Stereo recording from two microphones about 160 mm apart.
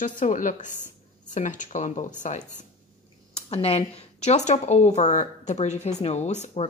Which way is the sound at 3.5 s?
40° left (ahead or behind).